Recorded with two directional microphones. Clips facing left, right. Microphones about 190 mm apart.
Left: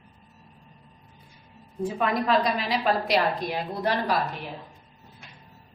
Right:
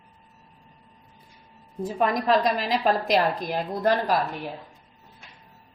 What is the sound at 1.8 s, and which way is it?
A woman's voice, 40° right (ahead or behind).